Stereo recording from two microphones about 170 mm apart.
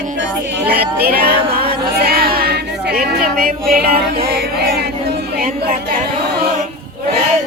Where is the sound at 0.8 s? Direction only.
65° right (ahead or behind).